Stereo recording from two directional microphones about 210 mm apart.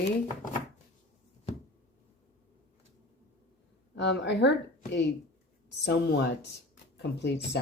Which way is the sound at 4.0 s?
55° left (ahead or behind).